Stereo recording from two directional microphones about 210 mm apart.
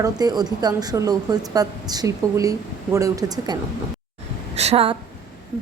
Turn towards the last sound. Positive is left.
turn(degrees=-30)  # may be behind; listen again after turning